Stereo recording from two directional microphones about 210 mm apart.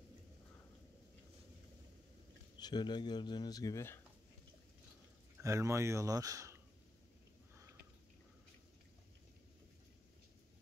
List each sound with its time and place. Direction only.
2.6 s speech: 20° left (ahead or behind)
5.4 s speech: 15° right (ahead or behind)